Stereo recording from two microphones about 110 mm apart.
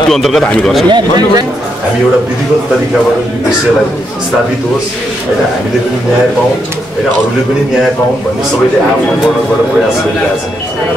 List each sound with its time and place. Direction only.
0.1 s speech: centre (ahead or behind)
0.8 s speech: 40° right (ahead or behind)